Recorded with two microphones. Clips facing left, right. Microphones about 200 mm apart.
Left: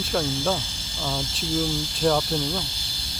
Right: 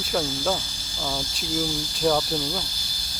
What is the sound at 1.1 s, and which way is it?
Speech, 25° left (ahead or behind).